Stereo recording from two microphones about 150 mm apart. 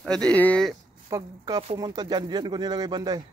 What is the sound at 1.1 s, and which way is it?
Speech, 25° right (ahead or behind).